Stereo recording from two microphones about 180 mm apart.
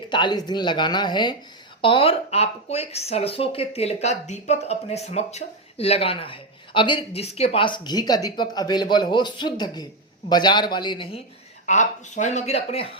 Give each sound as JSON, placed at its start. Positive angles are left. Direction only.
{"t": 0.1, "sound": "speech", "side_deg": 25}
{"t": 11.6, "sound": "speech", "side_deg": 40}